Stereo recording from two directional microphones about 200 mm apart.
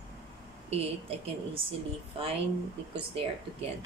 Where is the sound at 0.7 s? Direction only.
30° right (ahead or behind).